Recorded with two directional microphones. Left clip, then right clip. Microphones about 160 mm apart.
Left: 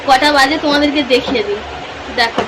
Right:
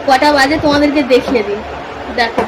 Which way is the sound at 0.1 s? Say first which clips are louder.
Even; 10° right (ahead or behind).